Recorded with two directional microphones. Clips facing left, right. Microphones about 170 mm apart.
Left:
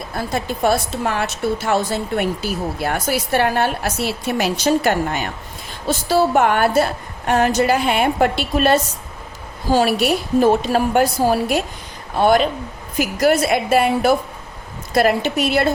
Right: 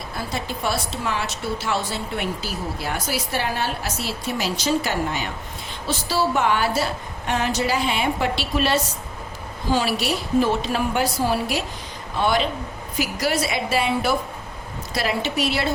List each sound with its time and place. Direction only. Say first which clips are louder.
0.3 s a woman's voice: left 8 dB; 50° left (ahead or behind)